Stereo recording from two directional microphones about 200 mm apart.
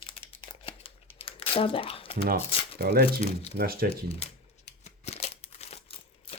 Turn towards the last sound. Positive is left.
turn(degrees=30)  # may be behind; listen again after turning